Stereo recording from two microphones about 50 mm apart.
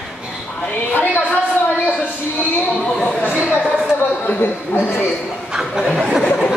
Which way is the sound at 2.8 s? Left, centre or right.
Centre.